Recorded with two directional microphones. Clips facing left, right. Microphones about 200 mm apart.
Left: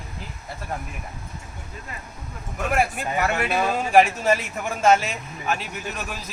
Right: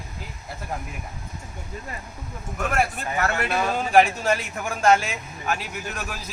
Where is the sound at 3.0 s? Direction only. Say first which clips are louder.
Left 1 dB; 15° left (ahead or behind).